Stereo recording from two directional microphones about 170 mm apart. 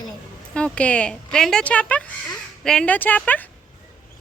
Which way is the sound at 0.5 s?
5° left (ahead or behind).